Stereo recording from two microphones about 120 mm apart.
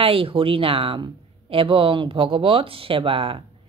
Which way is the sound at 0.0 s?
50° right (ahead or behind).